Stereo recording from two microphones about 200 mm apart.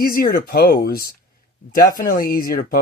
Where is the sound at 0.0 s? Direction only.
45° left (ahead or behind).